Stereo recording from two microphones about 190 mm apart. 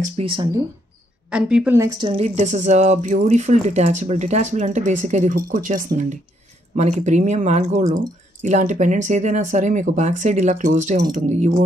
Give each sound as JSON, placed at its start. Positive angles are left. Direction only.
{"t": 0.0, "sound": "speech", "side_deg": -30}
{"t": 1.3, "sound": "a woman's voice", "side_deg": -5}
{"t": 1.9, "sound": "speech", "side_deg": -25}